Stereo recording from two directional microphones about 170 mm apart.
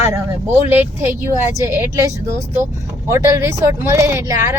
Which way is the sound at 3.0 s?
15° right (ahead or behind).